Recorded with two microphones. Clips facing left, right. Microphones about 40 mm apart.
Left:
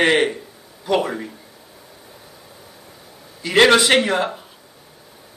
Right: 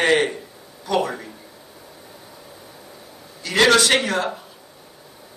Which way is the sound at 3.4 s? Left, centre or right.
Left.